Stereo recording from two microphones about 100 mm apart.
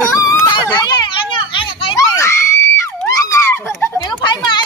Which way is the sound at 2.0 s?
30° left (ahead or behind).